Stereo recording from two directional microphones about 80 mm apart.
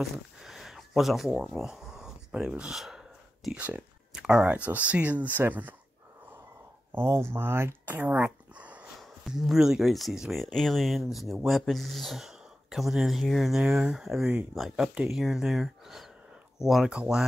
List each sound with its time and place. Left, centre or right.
0.0 s a sound: centre
2.7 s speech: centre
3.5 s speech: centre
4.1 s a sound: centre
4.6 s speech: centre
6.9 s speech: right
9.2 s speech: centre
13.6 s speech: centre